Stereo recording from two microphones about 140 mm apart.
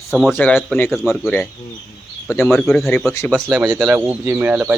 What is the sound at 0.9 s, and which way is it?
Speech, centre (ahead or behind).